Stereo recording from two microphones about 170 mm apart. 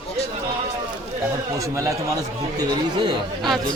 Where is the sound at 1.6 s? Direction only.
20° right (ahead or behind).